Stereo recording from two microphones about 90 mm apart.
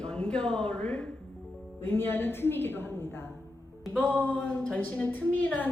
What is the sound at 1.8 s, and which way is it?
A woman's voice, 25° left (ahead or behind).